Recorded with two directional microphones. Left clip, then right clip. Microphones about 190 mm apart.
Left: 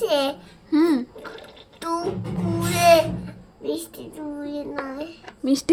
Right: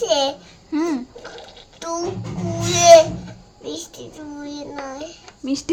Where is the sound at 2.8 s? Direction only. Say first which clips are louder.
Right 6 dB; 15° right (ahead or behind).